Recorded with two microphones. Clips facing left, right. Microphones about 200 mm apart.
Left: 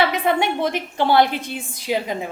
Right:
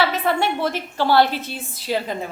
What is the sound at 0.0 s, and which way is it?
A woman's voice, 15° left (ahead or behind).